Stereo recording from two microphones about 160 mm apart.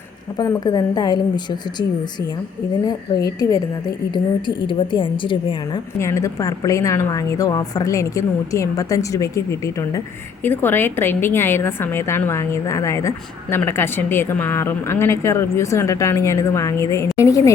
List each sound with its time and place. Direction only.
0.3 s a woman's voice: 20° left (ahead or behind)
4.1 s a woman's voice: 30° left (ahead or behind)
6.0 s a woman's voice: 20° left (ahead or behind)